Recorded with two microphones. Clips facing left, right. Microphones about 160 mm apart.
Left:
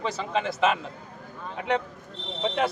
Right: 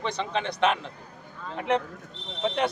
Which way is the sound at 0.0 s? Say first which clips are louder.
Left 1 dB; 5° left (ahead or behind).